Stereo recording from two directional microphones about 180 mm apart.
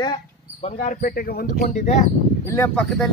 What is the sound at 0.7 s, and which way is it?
Speech, 45° left (ahead or behind).